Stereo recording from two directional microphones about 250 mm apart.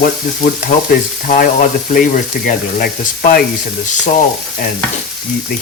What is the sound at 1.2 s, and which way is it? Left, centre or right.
Frying, left.